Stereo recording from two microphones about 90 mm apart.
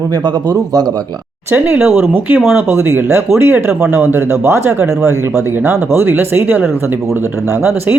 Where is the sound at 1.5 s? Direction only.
25° right (ahead or behind).